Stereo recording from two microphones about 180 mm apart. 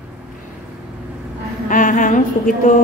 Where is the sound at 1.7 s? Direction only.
45° left (ahead or behind).